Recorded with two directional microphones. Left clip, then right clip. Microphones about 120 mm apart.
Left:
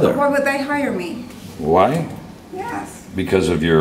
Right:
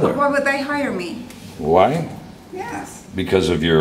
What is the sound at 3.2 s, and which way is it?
Speech, 5° right (ahead or behind).